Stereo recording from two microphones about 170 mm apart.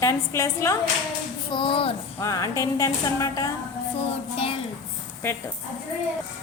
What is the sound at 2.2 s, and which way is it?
Speech, 20° left (ahead or behind).